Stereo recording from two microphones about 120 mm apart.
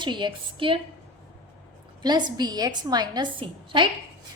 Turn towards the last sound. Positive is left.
turn(degrees=-40)  # may be behind; listen again after turning